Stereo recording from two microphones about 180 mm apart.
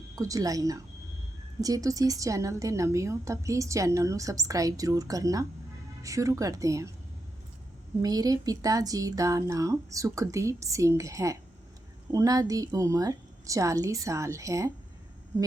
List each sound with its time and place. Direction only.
0.2 s a woman's voice: 20° right (ahead or behind)
8.0 s speech: 20° right (ahead or behind)